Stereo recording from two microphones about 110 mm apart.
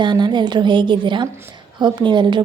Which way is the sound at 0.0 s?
45° right (ahead or behind).